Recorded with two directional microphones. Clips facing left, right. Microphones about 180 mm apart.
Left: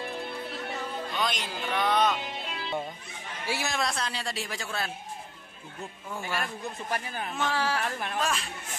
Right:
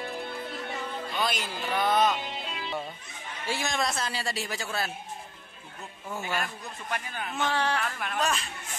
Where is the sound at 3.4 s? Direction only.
10° left (ahead or behind).